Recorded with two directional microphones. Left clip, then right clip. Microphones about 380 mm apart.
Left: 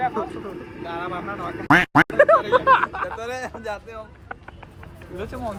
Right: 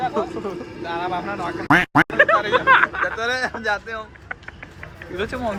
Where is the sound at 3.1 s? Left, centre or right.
Right.